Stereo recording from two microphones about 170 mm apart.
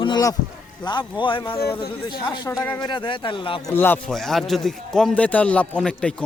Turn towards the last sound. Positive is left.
turn(degrees=5)  # may be behind; listen again after turning